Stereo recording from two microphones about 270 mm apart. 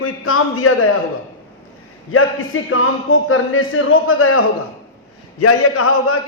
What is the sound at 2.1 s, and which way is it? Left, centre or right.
A man's voice, left.